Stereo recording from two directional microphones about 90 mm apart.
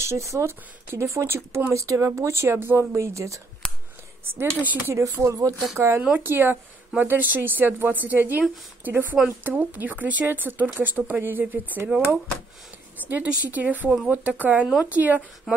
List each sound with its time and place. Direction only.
0.0 s speech: 30° right (ahead or behind)
4.4 s speech: 25° right (ahead or behind)
15.5 s speech: 5° right (ahead or behind)